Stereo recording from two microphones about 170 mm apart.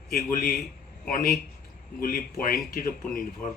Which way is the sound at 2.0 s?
55° left (ahead or behind).